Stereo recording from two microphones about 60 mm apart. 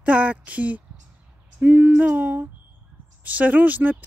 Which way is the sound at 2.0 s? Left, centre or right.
Right.